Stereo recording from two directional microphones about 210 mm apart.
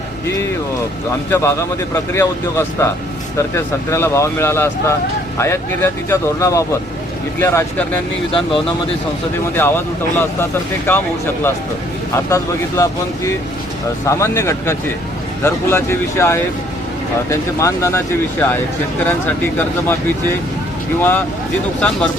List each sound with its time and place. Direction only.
1.3 s speech: 10° left (ahead or behind)
9.6 s speech: 10° left (ahead or behind)
12.1 s speech: 15° left (ahead or behind)